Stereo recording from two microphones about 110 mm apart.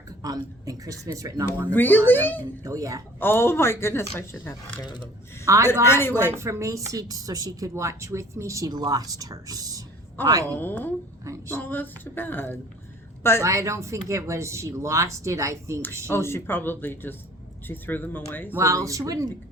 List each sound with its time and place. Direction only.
0.2 s speech: 35° right (ahead or behind)
1.6 s a sound: 15° left (ahead or behind)
2.6 s speech: 30° right (ahead or behind)
3.2 s speech: 20° left (ahead or behind)
4.8 s speech: 40° left (ahead or behind)
5.5 s speech: 30° right (ahead or behind)
5.8 s speech: 20° left (ahead or behind)
6.3 s speech: 25° right (ahead or behind)
10.2 s a sound: 20° left (ahead or behind)
13.4 s speech: 25° right (ahead or behind)
16.0 s speech: 20° left (ahead or behind)
17.7 s a sound: 15° left (ahead or behind)
18.5 s speech: 30° right (ahead or behind)